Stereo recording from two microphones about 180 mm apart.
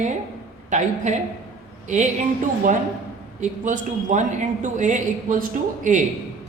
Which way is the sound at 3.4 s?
45° right (ahead or behind).